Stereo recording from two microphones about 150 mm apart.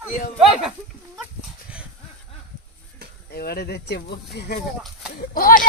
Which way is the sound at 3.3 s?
90° left.